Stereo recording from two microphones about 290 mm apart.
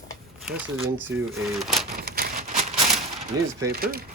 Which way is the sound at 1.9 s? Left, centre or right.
Right.